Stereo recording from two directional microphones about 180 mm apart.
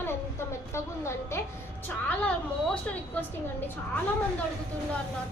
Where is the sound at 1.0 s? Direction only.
15° left (ahead or behind).